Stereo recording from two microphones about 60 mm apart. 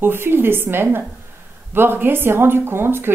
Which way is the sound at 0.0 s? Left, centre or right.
Right.